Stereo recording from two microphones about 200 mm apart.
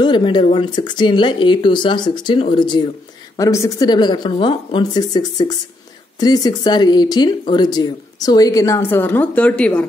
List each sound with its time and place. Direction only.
0.0 s speech: 20° left (ahead or behind); by 9.8 s 5° left (ahead or behind)